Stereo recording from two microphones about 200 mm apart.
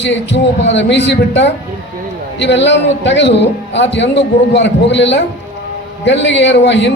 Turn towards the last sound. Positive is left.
turn(degrees=60)  # may be behind; listen again after turning